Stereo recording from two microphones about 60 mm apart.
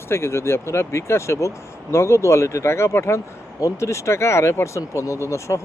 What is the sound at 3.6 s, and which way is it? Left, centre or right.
Speech, left.